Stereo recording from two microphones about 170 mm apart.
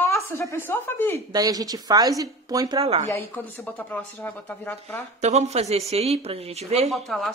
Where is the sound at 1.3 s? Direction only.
20° right (ahead or behind).